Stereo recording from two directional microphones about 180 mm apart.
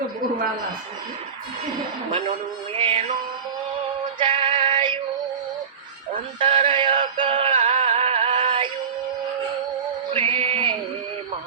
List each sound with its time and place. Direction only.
2.7 s music: 30° right (ahead or behind)
4.2 s female singing: 30° right (ahead or behind)
6.4 s synthetic singing: 30° right (ahead or behind)
10.1 s music: 35° right (ahead or behind)